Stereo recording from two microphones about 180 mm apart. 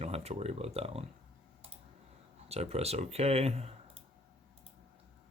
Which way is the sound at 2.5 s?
35° right (ahead or behind).